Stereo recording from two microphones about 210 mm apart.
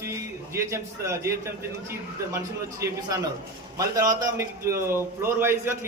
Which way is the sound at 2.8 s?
15° right (ahead or behind).